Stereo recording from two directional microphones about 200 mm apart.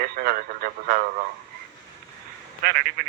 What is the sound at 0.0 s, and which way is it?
Radio, 50° right (ahead or behind).